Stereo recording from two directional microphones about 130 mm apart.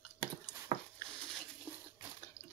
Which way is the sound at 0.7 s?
50° right (ahead or behind).